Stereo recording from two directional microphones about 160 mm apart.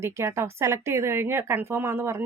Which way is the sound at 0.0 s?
15° right (ahead or behind).